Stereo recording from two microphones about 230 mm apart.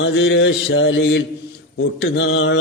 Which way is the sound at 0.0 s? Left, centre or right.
Left.